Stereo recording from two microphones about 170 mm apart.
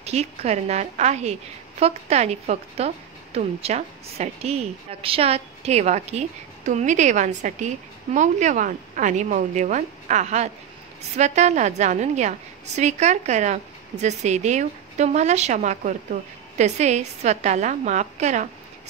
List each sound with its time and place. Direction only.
0.0 s a woman's voice: 40° right (ahead or behind)